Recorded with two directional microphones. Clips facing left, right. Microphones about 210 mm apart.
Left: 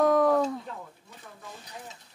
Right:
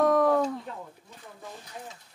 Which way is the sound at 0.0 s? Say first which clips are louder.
Even; centre (ahead or behind).